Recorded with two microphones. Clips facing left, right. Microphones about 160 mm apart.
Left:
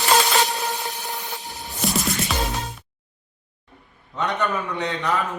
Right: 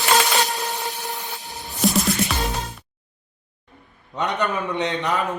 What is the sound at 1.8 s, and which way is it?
Music, centre (ahead or behind).